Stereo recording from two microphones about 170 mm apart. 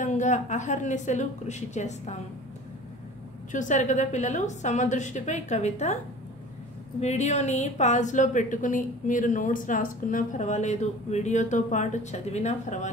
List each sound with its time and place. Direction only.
0.0 s a woman's voice: 45° left (ahead or behind)
3.5 s a woman's voice: 45° left (ahead or behind)
7.0 s a woman's voice: 40° left (ahead or behind)